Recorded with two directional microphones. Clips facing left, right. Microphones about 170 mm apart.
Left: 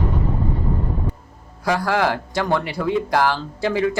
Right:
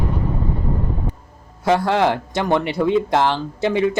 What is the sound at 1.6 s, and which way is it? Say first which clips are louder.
Speech: right 3 dB; 25° right (ahead or behind).